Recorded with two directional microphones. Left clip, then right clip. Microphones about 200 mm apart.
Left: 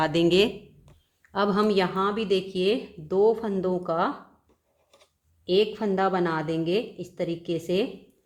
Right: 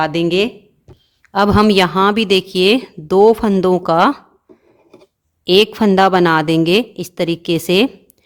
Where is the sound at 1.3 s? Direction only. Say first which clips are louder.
Right 11 dB; 40° right (ahead or behind).